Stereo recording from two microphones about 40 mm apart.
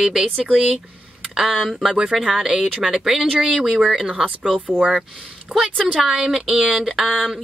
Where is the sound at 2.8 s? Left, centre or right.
Centre.